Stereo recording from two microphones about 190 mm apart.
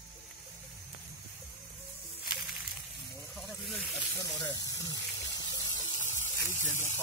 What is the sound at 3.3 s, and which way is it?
Snake, centre (ahead or behind).